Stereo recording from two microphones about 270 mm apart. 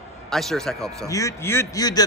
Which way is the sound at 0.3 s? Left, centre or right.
Centre.